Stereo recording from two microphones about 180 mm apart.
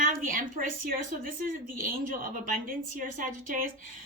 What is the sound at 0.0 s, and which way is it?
Speech, 50° right (ahead or behind).